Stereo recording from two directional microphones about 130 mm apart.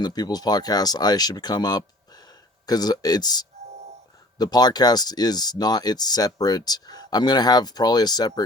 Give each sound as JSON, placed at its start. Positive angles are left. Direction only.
{"t": 0.0, "sound": "speech", "side_deg": 30}